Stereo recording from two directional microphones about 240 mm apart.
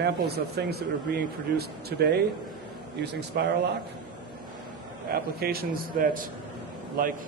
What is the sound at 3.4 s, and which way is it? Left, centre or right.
Speech, right.